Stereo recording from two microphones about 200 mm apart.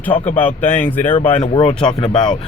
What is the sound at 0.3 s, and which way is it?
Speech, 10° left (ahead or behind).